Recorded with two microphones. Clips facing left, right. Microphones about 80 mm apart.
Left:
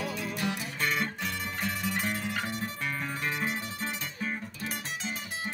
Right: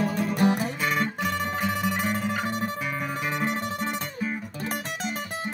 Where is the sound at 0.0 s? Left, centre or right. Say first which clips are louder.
Right 9 dB; right.